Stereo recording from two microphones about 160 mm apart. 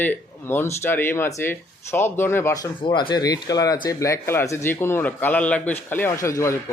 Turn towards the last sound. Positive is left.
turn(degrees=20)  # may be behind; listen again after turning